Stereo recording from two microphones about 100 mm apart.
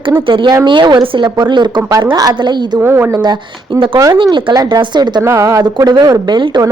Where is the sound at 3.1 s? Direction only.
45° right (ahead or behind).